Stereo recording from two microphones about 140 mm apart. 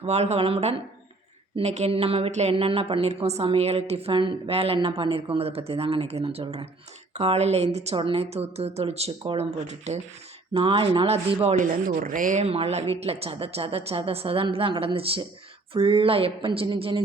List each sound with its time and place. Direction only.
0.0 s a woman's voice: 50° right (ahead or behind)
10.5 s a woman's voice: 40° right (ahead or behind)
11.5 s a woman's voice: 70° right (ahead or behind); by 17.0 s 40° right (ahead or behind)